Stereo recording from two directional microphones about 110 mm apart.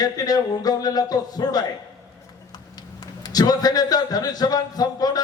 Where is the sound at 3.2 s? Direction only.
35° left (ahead or behind).